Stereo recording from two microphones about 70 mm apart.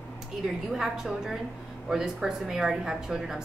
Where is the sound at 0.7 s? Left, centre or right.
Centre.